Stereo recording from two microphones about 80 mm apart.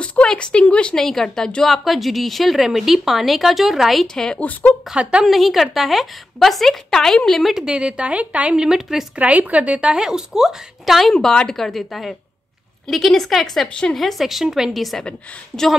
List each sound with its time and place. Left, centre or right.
0.0 s a woman's voice: centre
4.4 s a woman's voice: centre
5.2 s a woman's voice: centre